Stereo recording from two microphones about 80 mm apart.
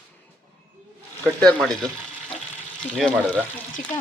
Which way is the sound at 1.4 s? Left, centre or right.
Centre.